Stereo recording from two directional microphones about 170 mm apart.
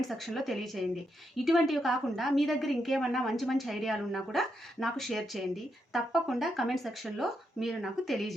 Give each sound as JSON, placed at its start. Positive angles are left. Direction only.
{"t": 0.1, "sound": "a woman's voice", "side_deg": 0}